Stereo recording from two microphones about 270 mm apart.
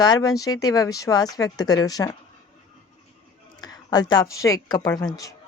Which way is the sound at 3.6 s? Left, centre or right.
Centre.